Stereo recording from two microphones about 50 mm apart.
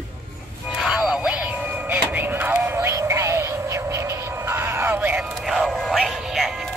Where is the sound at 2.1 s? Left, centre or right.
Right.